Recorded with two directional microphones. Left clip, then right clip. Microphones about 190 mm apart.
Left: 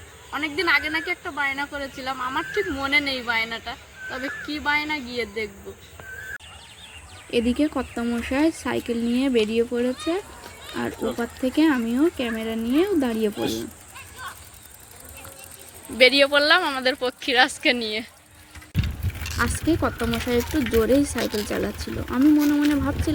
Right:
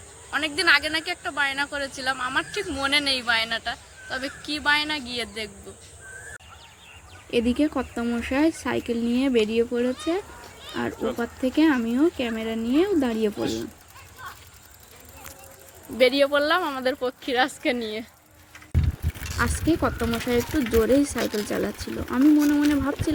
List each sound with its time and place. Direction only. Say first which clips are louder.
0.3 s a woman's voice: right 2 dB; 25° right (ahead or behind)
7.3 s speech: left 1 dB; centre (ahead or behind)
16.0 s speech: left 3 dB; 5° right (ahead or behind)
19.4 s speech: left 1 dB; centre (ahead or behind)